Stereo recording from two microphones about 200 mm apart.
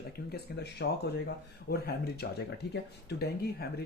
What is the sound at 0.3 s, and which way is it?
Speech, 55° left (ahead or behind).